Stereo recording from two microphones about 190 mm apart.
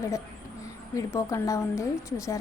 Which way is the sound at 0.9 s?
15° left (ahead or behind).